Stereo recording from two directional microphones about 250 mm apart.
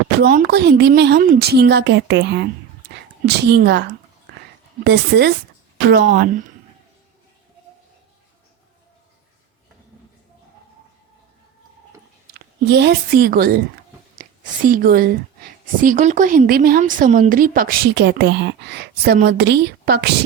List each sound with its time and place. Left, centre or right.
0.2 s a woman's voice: right
12.3 s a woman's voice: right